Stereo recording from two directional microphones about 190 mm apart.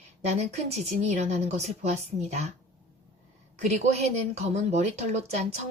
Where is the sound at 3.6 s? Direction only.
35° right (ahead or behind).